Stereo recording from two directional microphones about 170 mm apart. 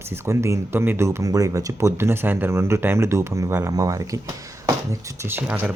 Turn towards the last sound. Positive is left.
turn(degrees=-10)  # may be behind; listen again after turning